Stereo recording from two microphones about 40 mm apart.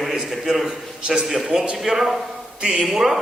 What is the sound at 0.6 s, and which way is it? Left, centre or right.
Speech, centre.